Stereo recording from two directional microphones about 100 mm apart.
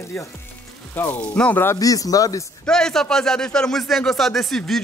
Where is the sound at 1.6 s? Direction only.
30° left (ahead or behind).